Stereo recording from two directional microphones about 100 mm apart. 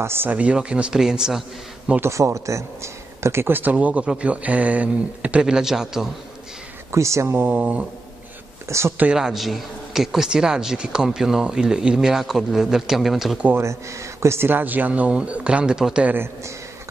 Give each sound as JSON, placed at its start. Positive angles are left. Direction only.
{"t": 0.0, "sound": "speech", "side_deg": -20}
{"t": 2.0, "sound": "speech", "side_deg": -30}
{"t": 6.9, "sound": "speech", "side_deg": -30}
{"t": 7.5, "sound": "speech", "side_deg": -10}
{"t": 8.6, "sound": "speech", "side_deg": -30}
{"t": 8.9, "sound": "a man's voice", "side_deg": -10}
{"t": 13.5, "sound": "speech", "side_deg": -30}